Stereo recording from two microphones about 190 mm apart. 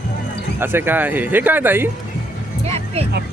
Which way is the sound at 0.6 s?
10° right (ahead or behind).